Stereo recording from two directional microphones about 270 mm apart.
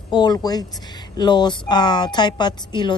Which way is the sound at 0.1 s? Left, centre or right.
Centre.